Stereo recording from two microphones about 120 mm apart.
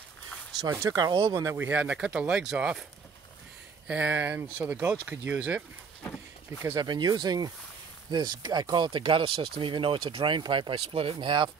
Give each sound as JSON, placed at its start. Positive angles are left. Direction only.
{"t": 0.8, "sound": "speech", "side_deg": -30}
{"t": 1.7, "sound": "speech", "side_deg": -10}
{"t": 3.8, "sound": "speech", "side_deg": -10}
{"t": 6.8, "sound": "speech", "side_deg": -35}